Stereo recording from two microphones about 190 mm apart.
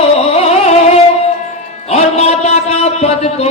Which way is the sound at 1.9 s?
35° left (ahead or behind).